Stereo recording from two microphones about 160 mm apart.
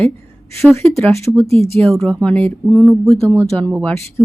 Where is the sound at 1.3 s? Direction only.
10° right (ahead or behind).